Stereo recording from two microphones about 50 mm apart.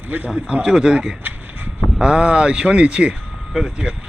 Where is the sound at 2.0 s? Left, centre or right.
Centre.